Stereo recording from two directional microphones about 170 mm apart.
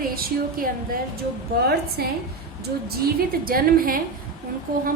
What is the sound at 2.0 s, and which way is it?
Speech, 65° right (ahead or behind).